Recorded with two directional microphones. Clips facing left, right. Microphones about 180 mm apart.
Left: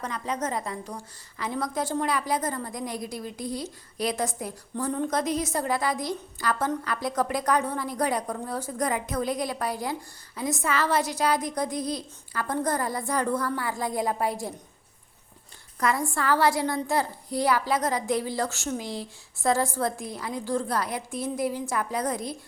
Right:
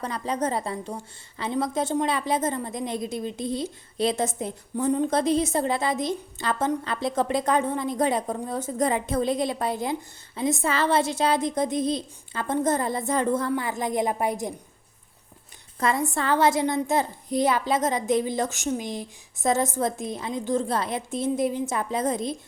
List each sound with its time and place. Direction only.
0.0 s a woman's voice: 30° right (ahead or behind)
15.8 s a woman's voice: 25° right (ahead or behind)